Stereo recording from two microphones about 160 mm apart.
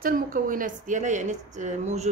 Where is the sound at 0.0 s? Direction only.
60° right (ahead or behind).